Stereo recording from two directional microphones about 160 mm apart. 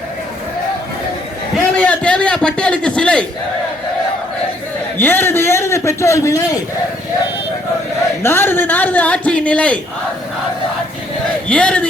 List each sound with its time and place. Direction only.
1.7 s a sound: 10° left (ahead or behind)
4.9 s a man's voice: 15° left (ahead or behind)
8.2 s a man's voice: 15° left (ahead or behind)
11.4 s a man's voice: 5° left (ahead or behind)